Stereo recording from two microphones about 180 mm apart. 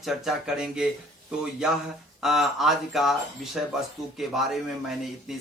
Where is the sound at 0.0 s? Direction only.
Centre (ahead or behind).